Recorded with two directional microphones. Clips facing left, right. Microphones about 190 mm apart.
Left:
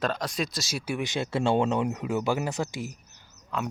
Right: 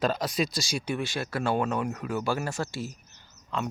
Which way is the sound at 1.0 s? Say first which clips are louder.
Left 3 dB; 20° left (ahead or behind).